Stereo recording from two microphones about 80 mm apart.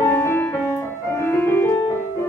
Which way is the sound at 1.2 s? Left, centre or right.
Left.